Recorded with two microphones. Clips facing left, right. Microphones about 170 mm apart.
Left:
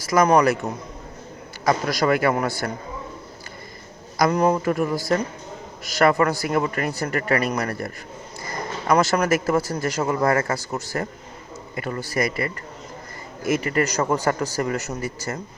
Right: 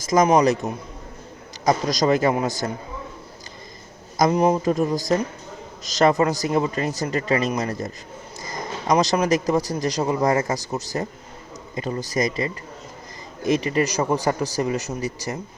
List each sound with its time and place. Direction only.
0.0 s speech: 20° right (ahead or behind)
4.2 s speech: 20° right (ahead or behind)